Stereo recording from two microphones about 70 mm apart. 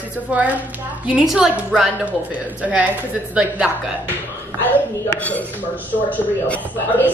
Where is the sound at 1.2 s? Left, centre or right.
Centre.